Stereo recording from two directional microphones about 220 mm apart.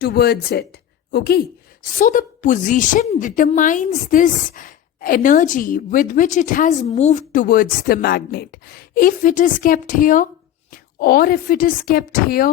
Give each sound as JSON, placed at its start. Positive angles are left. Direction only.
{"t": 0.0, "sound": "a woman's voice", "side_deg": 45}